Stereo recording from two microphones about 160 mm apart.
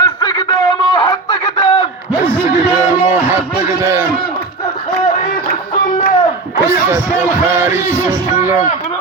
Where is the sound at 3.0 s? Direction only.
15° right (ahead or behind).